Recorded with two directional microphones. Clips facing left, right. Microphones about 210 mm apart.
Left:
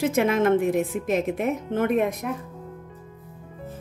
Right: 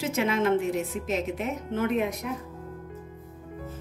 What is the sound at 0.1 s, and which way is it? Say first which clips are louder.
A woman's voice: left 4 dB; 55° left (ahead or behind).